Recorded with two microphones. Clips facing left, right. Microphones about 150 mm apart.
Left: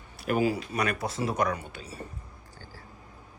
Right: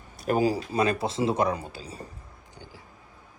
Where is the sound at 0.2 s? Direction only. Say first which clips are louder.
Right 2 dB; 40° right (ahead or behind).